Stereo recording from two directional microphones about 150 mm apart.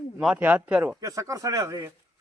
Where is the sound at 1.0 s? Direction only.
20° right (ahead or behind).